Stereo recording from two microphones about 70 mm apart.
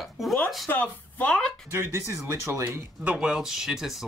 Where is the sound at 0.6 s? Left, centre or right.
Left.